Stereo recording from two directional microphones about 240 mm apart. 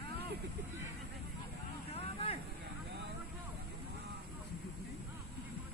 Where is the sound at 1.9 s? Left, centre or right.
Left.